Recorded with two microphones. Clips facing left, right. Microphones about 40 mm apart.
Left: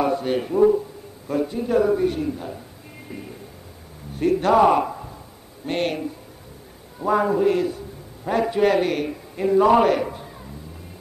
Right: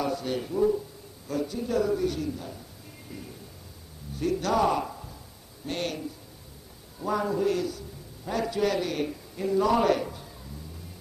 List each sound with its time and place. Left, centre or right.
0.0 s a man's voice: left